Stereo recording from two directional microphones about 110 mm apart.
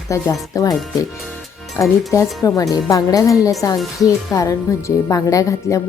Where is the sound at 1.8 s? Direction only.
25° left (ahead or behind).